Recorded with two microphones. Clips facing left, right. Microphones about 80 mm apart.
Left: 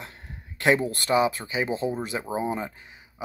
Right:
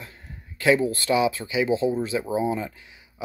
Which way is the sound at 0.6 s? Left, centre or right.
Left.